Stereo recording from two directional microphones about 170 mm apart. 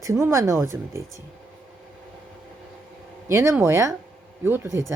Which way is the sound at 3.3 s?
15° right (ahead or behind).